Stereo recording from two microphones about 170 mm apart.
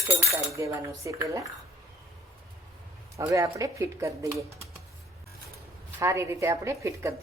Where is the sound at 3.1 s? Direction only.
20° right (ahead or behind).